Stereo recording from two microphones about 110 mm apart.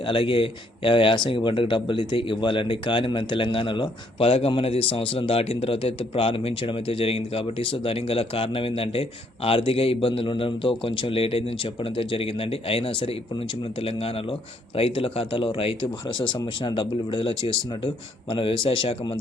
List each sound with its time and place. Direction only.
0.0 s speech: 50° left (ahead or behind)